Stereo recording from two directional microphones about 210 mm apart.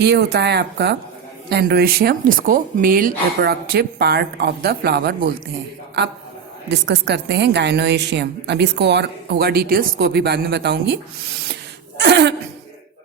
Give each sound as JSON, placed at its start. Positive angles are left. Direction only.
{"t": 0.0, "sound": "a woman's voice", "side_deg": -50}
{"t": 6.7, "sound": "a woman's voice", "side_deg": -55}
{"t": 11.9, "sound": "a sound", "side_deg": -55}